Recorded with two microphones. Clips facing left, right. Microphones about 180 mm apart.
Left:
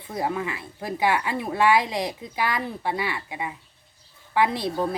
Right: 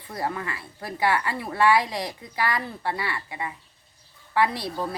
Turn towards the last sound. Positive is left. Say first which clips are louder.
# left 4 dB
turn(degrees=20)  # may be behind; listen again after turning